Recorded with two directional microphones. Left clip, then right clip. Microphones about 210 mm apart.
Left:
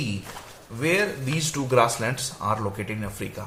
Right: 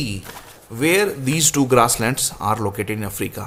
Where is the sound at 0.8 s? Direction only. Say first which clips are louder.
Right 6 dB; 50° right (ahead or behind).